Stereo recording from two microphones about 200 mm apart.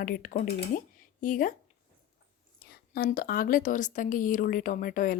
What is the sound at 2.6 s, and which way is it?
A woman's voice, 50° left (ahead or behind).